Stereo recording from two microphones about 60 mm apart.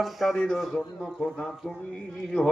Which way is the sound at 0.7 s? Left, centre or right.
Centre.